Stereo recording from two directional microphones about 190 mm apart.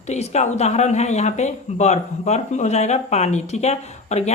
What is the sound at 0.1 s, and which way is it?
Speech, 35° left (ahead or behind).